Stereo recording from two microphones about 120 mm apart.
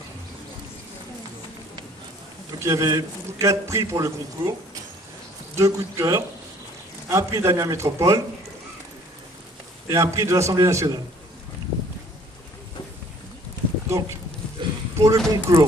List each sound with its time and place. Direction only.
2.6 s a man's voice: 25° right (ahead or behind)
5.6 s a man's voice: 25° right (ahead or behind)
9.8 s a man's voice: 25° right (ahead or behind)
13.8 s speech: 20° right (ahead or behind)
14.6 s a sound: 40° right (ahead or behind)
15.0 s a man's voice: 25° right (ahead or behind)